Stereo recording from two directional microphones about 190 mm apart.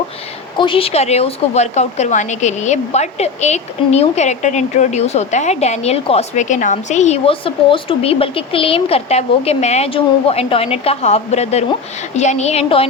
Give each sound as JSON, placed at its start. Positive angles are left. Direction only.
{"t": 0.5, "sound": "a woman's voice", "side_deg": 25}